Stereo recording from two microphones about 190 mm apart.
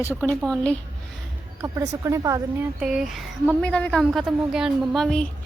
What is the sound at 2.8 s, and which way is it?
Speech, 5° right (ahead or behind).